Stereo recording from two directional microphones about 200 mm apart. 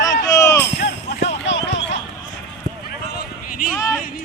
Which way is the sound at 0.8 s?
55° left (ahead or behind).